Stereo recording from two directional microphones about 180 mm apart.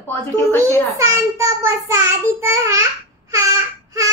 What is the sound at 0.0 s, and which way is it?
Speech, 10° left (ahead or behind).